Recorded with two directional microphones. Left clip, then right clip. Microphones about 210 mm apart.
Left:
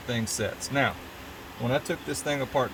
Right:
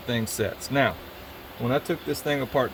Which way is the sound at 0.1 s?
40° right (ahead or behind).